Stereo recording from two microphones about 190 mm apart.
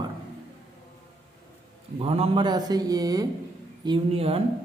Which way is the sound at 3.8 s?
30° right (ahead or behind).